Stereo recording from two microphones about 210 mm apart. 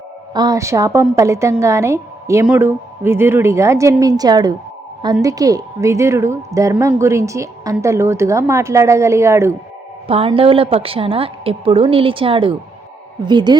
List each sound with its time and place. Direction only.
0.3 s a woman's voice: 15° right (ahead or behind)
10.1 s a woman's voice: 25° right (ahead or behind)